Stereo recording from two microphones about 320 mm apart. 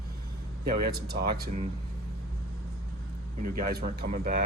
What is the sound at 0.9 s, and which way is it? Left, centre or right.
Speech, right.